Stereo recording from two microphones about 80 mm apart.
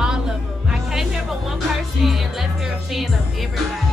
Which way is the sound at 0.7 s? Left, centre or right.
Centre.